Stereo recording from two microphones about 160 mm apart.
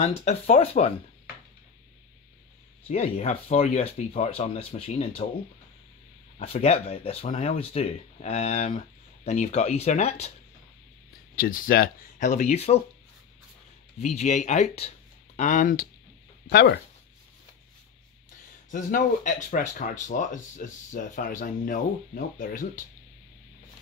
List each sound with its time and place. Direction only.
0.1 s speech: 40° left (ahead or behind)
2.9 s speech: 40° left (ahead or behind)
6.4 s speech: 40° left (ahead or behind)
11.3 s speech: 65° left (ahead or behind); by 12.8 s 40° left (ahead or behind)
14.0 s speech: 45° left (ahead or behind); by 15.9 s 65° left (ahead or behind)
16.4 s speech: 75° left (ahead or behind)
18.7 s speech: 55° left (ahead or behind)